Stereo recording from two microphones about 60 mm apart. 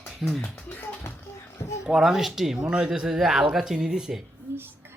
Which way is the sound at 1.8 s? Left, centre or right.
Centre.